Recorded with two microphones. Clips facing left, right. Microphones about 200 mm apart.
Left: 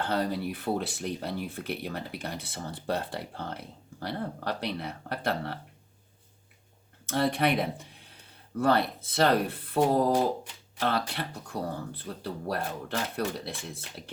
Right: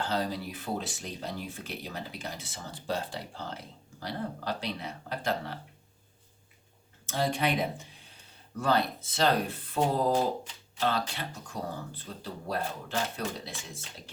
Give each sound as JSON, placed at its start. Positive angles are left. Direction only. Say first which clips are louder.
{"t": 0.0, "sound": "speech", "louder": "left 3 dB", "side_deg": 60}
{"t": 7.0, "sound": "speech", "louder": "left 3 dB", "side_deg": 60}